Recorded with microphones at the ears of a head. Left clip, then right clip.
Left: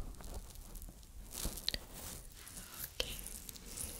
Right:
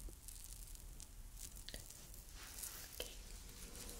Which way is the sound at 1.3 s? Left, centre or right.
Left.